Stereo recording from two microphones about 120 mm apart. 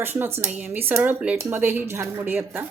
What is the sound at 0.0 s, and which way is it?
Speech, 15° right (ahead or behind).